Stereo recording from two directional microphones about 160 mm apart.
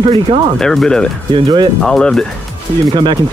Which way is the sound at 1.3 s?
30° right (ahead or behind).